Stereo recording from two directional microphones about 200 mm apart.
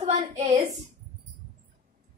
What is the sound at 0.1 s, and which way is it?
Speech, 35° right (ahead or behind).